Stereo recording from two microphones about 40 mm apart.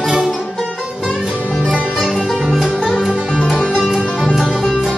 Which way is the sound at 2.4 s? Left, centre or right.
Centre.